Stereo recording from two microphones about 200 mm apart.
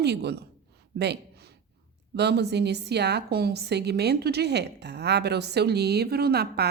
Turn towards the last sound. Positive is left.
turn(degrees=-55)  # may be behind; listen again after turning